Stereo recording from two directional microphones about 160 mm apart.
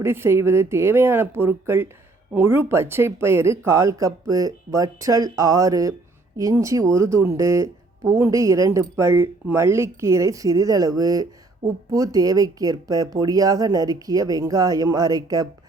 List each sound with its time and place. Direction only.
0.0 s speech: 15° right (ahead or behind)